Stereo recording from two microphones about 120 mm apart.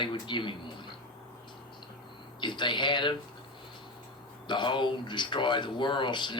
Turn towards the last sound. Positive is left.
turn(degrees=40)  # may be behind; listen again after turning